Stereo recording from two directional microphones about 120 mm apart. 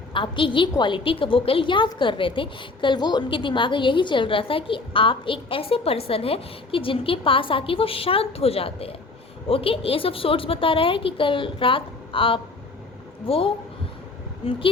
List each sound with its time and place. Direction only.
0.1 s a woman's voice: 45° left (ahead or behind)